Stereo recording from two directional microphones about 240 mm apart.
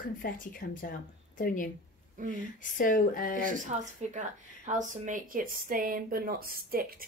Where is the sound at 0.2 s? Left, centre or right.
Left.